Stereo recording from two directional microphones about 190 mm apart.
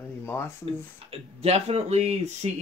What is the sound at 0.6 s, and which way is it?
Speech, 30° right (ahead or behind).